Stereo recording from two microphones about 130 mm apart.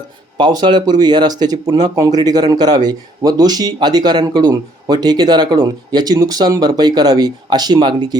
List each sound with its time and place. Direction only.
0.3 s speech: 35° right (ahead or behind)